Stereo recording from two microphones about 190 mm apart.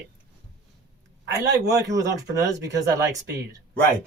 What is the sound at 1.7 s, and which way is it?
Speech, 15° right (ahead or behind).